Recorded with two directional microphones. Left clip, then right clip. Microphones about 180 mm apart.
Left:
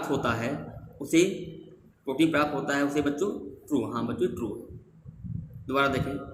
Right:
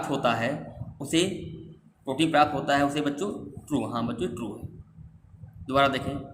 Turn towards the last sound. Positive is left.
turn(degrees=-40)  # may be behind; listen again after turning